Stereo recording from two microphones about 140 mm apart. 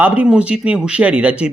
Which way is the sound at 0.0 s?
10° right (ahead or behind).